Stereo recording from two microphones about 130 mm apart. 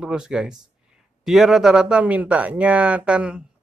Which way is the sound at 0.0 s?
5° right (ahead or behind).